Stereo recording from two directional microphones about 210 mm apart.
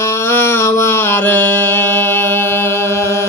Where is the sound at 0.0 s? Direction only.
10° left (ahead or behind).